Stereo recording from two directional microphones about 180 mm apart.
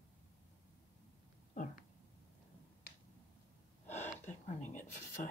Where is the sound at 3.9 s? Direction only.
40° left (ahead or behind).